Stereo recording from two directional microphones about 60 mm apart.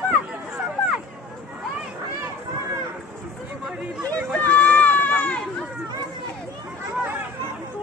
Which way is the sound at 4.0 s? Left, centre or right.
Right.